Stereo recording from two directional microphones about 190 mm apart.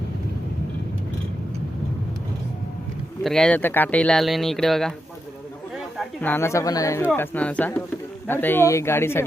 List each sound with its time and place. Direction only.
3.2 s speech: 5° left (ahead or behind)
5.7 s a sound: centre (ahead or behind)
6.3 s speech: 15° left (ahead or behind)